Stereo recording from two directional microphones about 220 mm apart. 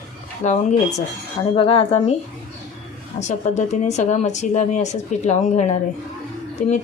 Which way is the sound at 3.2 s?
30° left (ahead or behind).